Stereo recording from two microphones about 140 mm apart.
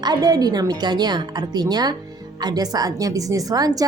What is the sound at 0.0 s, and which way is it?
A woman's voice, 30° right (ahead or behind).